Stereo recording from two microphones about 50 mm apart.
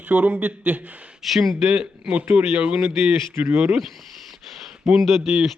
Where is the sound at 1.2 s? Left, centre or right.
Centre.